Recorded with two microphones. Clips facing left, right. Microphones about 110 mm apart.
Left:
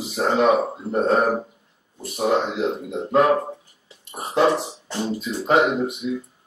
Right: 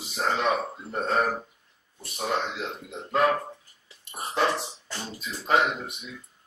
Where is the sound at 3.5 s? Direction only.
25° left (ahead or behind).